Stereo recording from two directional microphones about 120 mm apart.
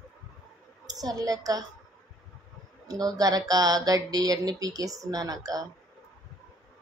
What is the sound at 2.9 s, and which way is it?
Speech, 30° right (ahead or behind).